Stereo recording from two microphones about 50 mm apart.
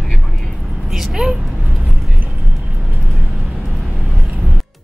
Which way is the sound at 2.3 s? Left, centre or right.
Right.